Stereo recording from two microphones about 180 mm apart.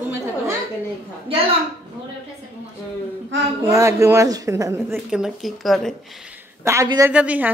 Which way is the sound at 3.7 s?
15° right (ahead or behind).